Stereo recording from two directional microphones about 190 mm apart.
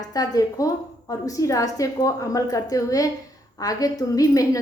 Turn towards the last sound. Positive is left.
turn(degrees=20)  # may be behind; listen again after turning